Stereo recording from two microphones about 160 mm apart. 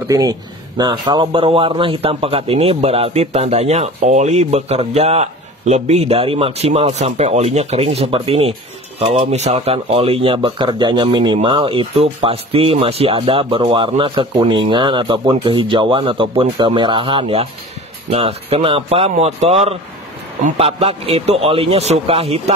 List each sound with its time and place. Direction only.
0.1 s a man's voice: 25° right (ahead or behind); by 22.4 s 40° right (ahead or behind)